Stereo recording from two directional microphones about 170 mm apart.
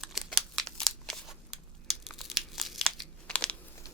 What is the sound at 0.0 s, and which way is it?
Scissors, centre (ahead or behind).